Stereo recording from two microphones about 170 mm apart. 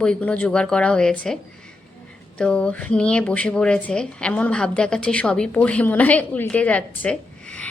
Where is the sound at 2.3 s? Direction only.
5° left (ahead or behind).